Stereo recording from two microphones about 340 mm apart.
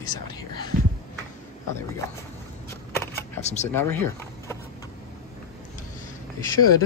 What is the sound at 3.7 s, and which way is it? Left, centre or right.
Speech, centre.